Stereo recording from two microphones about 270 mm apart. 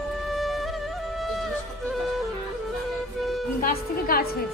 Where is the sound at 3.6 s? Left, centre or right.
Left.